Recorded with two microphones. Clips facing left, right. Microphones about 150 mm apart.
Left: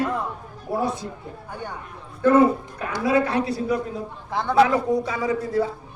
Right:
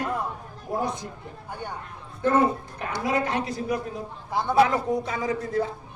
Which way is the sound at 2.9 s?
20° right (ahead or behind).